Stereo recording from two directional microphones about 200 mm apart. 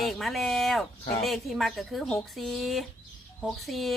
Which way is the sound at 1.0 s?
30° left (ahead or behind).